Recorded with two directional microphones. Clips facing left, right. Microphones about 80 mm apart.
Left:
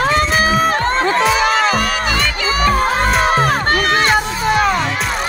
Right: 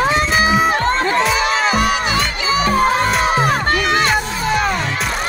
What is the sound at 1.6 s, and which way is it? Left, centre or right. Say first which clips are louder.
Music: even; left.